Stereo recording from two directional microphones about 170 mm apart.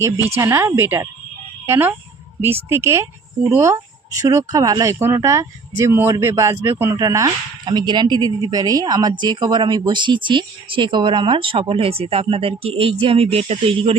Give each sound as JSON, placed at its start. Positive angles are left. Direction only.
{"t": 0.3, "sound": "speech", "side_deg": -15}